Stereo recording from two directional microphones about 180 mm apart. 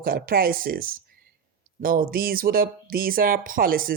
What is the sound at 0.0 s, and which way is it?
Speech, 55° right (ahead or behind).